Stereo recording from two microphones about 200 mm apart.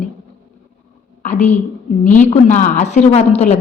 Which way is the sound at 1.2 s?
35° left (ahead or behind).